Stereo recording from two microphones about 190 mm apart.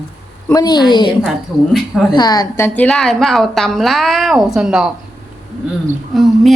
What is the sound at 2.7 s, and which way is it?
A woman's voice, 5° left (ahead or behind).